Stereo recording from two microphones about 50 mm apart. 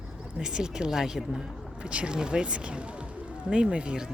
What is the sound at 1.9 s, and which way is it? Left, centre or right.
Speech, right.